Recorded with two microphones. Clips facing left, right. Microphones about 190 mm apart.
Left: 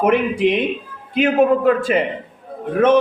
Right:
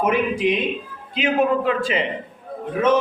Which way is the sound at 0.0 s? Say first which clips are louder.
Left 4 dB; 60° left (ahead or behind).